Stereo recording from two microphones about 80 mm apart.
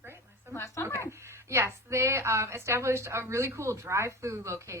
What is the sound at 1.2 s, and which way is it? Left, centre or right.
A woman's voice, right.